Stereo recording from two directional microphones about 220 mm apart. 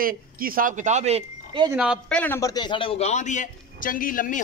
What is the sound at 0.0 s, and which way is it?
Speech, 40° right (ahead or behind).